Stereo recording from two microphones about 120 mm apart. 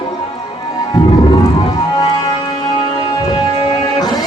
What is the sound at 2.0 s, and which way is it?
Music, 40° left (ahead or behind).